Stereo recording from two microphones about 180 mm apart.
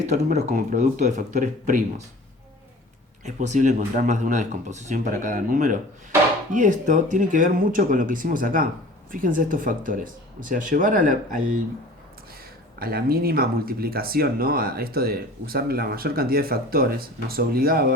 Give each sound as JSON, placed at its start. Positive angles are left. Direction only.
{"t": 0.1, "sound": "speech", "side_deg": -40}
{"t": 3.2, "sound": "speech", "side_deg": -40}
{"t": 12.8, "sound": "speech", "side_deg": -55}